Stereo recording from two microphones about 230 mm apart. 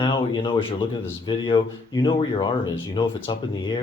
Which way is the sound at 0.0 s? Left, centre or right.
Left.